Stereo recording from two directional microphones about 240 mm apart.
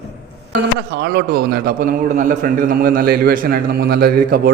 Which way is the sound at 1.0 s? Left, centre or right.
Right.